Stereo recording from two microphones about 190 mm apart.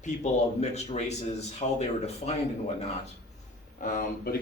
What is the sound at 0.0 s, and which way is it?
Speech, 40° left (ahead or behind).